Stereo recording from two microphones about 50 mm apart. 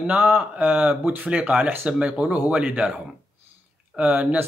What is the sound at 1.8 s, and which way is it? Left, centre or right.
Speech, right.